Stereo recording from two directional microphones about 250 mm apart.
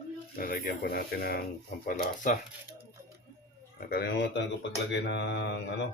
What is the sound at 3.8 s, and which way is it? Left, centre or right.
Speech, left.